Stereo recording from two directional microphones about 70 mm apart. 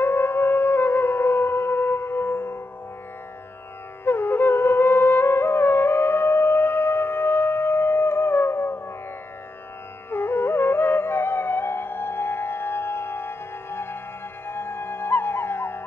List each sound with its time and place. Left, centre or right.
0.0 s music: left
4.0 s music: left
10.1 s music: left